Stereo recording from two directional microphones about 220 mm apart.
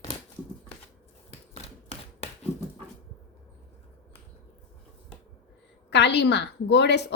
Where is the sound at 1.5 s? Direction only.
25° left (ahead or behind).